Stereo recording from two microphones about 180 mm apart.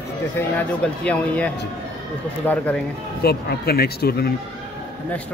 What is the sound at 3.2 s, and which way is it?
Speech, 60° left (ahead or behind).